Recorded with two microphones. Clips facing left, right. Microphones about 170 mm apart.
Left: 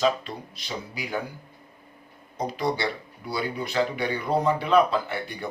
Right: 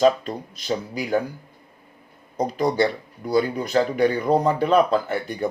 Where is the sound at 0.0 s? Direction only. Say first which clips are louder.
Right 6 dB; 45° right (ahead or behind).